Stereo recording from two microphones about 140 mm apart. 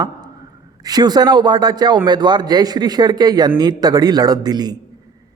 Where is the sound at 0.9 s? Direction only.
30° right (ahead or behind).